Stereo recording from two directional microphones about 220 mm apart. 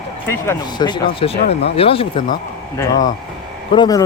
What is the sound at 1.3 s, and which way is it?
Speech, 45° left (ahead or behind).